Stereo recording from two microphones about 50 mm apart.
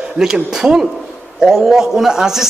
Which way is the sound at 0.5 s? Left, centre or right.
Centre.